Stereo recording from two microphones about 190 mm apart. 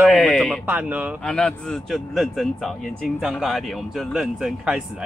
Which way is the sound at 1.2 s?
5° left (ahead or behind).